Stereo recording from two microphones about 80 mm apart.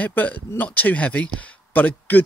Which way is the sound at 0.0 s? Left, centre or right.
Centre.